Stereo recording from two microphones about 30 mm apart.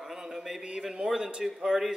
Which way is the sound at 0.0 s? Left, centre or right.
Centre.